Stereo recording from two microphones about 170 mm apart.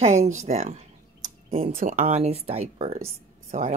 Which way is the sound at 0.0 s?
40° right (ahead or behind).